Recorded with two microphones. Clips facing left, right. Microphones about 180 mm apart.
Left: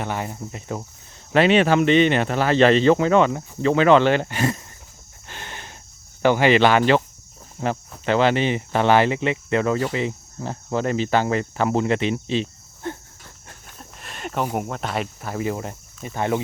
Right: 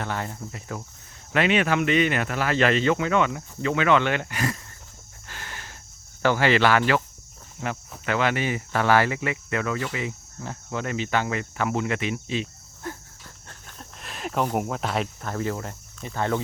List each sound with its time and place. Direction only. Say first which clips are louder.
0.0 s cricket: left 3 dB; 15° left (ahead or behind)
1.3 s speech: left 6 dB; 30° left (ahead or behind)
5.3 s a sound: left 3 dB; 20° left (ahead or behind)
6.2 s cricket: left 4 dB; 20° left (ahead or behind)
13.5 s speech: left 1 dB; 5° left (ahead or behind)